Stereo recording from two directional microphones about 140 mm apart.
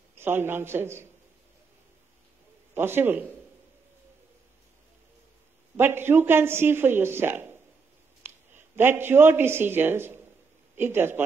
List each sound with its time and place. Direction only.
0.1 s a man's voice: 15° right (ahead or behind)
2.7 s speech: 15° right (ahead or behind)
5.8 s speech: 15° right (ahead or behind)